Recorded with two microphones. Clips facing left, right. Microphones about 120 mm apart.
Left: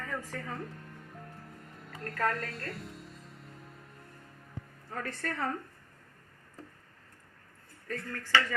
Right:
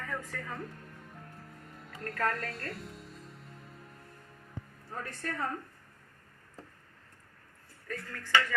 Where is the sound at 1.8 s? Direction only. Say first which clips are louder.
Left 1 dB; centre (ahead or behind).